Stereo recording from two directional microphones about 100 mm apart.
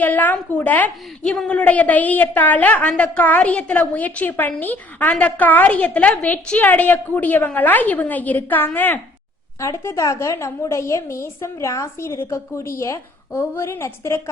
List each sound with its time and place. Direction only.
0.0 s a woman's voice: 15° left (ahead or behind)
9.6 s a woman's voice: 30° left (ahead or behind)